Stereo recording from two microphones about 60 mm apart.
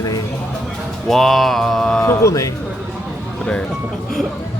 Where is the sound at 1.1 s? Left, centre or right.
Centre.